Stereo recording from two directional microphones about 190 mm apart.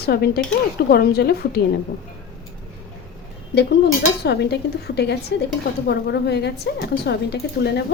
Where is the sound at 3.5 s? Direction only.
60° left (ahead or behind).